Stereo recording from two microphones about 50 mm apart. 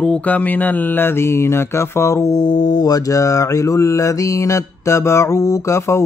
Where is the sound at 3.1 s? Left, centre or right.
Left.